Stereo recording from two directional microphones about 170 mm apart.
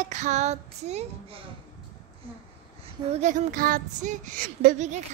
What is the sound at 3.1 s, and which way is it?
Child singing, 45° right (ahead or behind).